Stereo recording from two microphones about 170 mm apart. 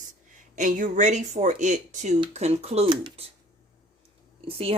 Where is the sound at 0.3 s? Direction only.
50° right (ahead or behind); by 3.2 s 30° right (ahead or behind).